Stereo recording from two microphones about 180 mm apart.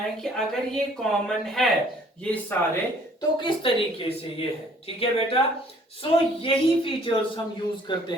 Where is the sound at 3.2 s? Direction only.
30° left (ahead or behind).